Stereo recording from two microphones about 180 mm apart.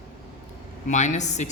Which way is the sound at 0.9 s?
40° left (ahead or behind).